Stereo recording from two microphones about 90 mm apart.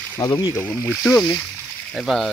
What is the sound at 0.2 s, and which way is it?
Speech, 45° left (ahead or behind).